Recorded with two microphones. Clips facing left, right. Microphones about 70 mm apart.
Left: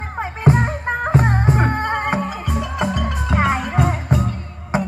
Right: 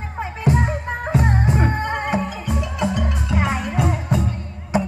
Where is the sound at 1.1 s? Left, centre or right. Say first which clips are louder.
Left 1 dB; left.